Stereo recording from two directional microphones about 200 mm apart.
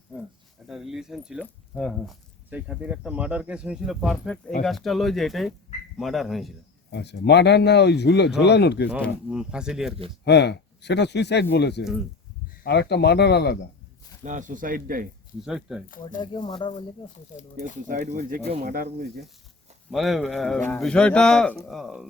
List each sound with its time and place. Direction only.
0.1 s a sound: centre (ahead or behind)
0.7 s speech: centre (ahead or behind)
6.9 s speech: 55° left (ahead or behind)
9.3 s speech: 5° right (ahead or behind)
10.2 s speech: 55° left (ahead or behind)
14.3 s speech: 40° right (ahead or behind)
15.4 s speech: centre (ahead or behind)
16.2 s speech: 20° left (ahead or behind)
17.8 s speech: 40° right (ahead or behind)
19.9 s speech: centre (ahead or behind)